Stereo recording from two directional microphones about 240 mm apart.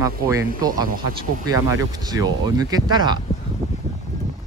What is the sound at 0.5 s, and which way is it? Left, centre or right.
Speech, right.